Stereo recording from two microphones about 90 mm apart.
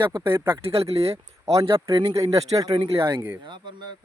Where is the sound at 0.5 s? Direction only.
90° right.